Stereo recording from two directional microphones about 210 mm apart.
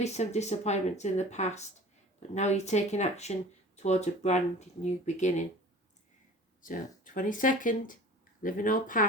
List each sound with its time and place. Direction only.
0.0 s speech: 30° left (ahead or behind)
6.6 s speech: 40° left (ahead or behind)